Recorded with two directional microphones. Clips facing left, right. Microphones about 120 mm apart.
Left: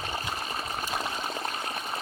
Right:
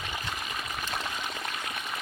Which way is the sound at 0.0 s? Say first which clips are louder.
Left 3 dB; 35° left (ahead or behind).